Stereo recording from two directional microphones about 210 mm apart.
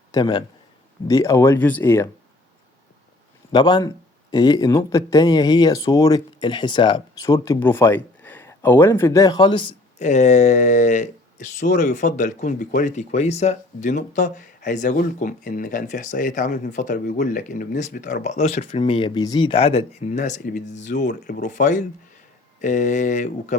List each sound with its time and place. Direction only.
0.1 s a man's voice: 20° left (ahead or behind)
3.5 s speech: 20° left (ahead or behind); by 23.6 s 35° left (ahead or behind)